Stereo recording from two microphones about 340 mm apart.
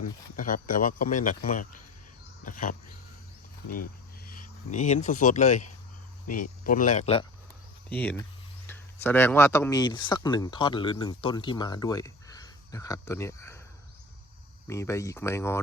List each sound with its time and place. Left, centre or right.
0.3 s speech: left
2.4 s a sound: left
4.7 s speech: left
6.7 s speech: left
7.9 s speech: centre
14.7 s speech: centre